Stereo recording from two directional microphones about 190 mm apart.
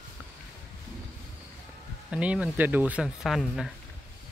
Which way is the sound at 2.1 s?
5° right (ahead or behind).